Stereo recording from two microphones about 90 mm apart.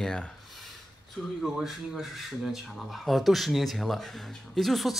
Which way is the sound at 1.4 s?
5° right (ahead or behind).